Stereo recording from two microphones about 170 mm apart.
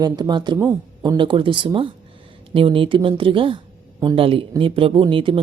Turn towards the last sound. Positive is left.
turn(degrees=-30)  # may be behind; listen again after turning